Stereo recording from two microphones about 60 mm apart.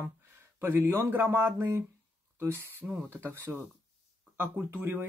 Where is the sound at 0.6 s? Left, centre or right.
Right.